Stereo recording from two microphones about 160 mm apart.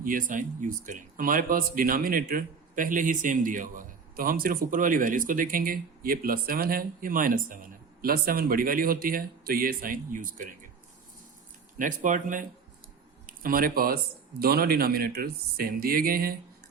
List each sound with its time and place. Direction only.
0.0 s speech: 60° right (ahead or behind)
11.8 s speech: 55° right (ahead or behind)